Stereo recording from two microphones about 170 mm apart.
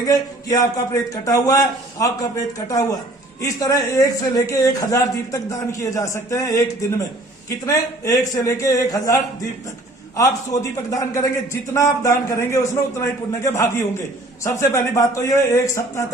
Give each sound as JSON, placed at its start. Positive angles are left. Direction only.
{"t": 0.0, "sound": "a man's voice", "side_deg": 20}
{"t": 10.6, "sound": "a man's voice", "side_deg": 20}